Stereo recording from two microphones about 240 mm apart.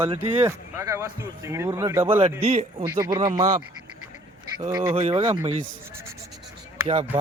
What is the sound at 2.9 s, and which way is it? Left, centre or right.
Speech, centre.